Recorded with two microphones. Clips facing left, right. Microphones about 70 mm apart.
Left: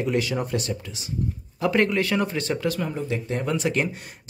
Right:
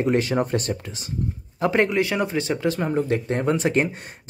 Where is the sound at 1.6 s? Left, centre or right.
Right.